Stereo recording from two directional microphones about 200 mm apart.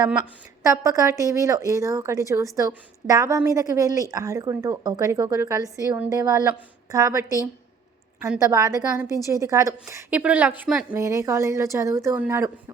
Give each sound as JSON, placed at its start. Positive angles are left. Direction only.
{"t": 0.6, "sound": "speech", "side_deg": -15}
{"t": 8.3, "sound": "speech", "side_deg": -15}